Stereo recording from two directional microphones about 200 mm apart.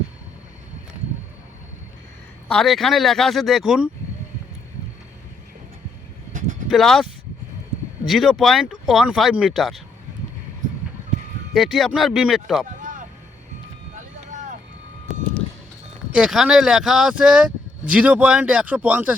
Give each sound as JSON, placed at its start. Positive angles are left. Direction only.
{"t": 2.5, "sound": "speech", "side_deg": 0}
{"t": 6.7, "sound": "speech", "side_deg": 0}
{"t": 11.5, "sound": "speech", "side_deg": 0}
{"t": 12.6, "sound": "vehicle", "side_deg": -40}
{"t": 16.1, "sound": "speech", "side_deg": -5}